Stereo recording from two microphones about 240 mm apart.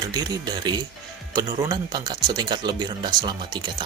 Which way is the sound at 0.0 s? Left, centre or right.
Centre.